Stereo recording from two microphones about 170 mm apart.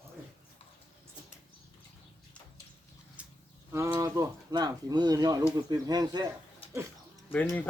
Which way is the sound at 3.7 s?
20° right (ahead or behind).